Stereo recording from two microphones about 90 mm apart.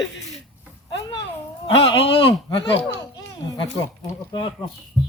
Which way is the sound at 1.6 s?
75° left (ahead or behind).